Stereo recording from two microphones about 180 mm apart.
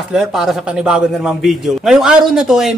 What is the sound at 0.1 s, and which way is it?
A man's voice, centre (ahead or behind).